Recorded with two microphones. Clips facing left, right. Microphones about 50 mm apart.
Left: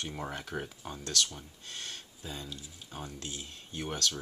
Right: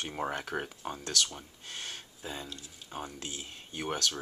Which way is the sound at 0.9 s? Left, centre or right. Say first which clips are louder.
Left 1 dB; centre.